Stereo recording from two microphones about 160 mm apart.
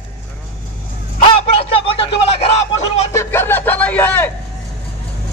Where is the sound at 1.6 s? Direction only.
35° left (ahead or behind).